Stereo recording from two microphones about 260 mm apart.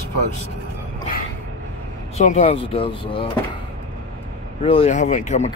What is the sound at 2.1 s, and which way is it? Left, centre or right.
Speech, left.